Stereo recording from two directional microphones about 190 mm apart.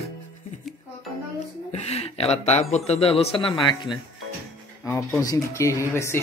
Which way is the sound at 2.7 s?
35° left (ahead or behind).